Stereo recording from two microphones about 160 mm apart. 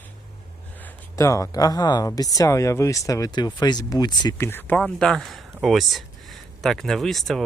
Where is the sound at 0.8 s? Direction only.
15° left (ahead or behind).